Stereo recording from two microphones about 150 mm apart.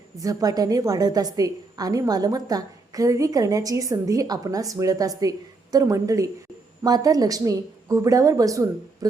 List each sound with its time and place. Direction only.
0.2 s a woman's voice: 25° right (ahead or behind)